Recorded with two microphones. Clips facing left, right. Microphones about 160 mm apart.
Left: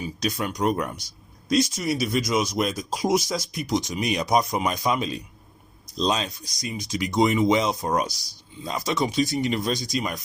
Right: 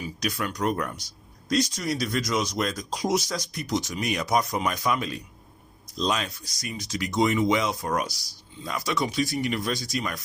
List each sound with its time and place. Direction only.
0.0 s speech: 25° left (ahead or behind)